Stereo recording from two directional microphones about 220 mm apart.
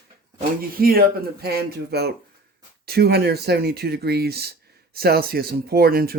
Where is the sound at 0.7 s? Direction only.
40° right (ahead or behind).